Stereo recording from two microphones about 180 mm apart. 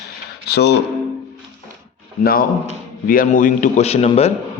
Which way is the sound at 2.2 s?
55° left (ahead or behind).